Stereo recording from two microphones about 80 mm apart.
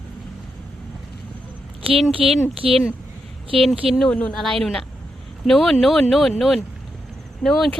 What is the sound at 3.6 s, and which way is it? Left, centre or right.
Speech, centre.